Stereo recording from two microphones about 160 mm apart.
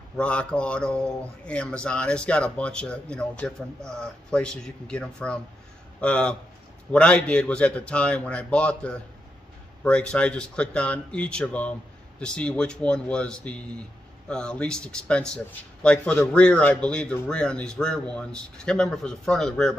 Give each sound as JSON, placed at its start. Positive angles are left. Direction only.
{"t": 0.2, "sound": "speech", "side_deg": 5}